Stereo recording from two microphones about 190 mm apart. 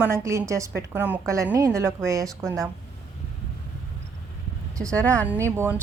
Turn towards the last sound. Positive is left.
turn(degrees=-15)  # may be behind; listen again after turning